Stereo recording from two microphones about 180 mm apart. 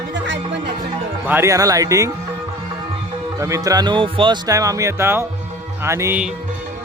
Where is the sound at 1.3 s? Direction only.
15° right (ahead or behind).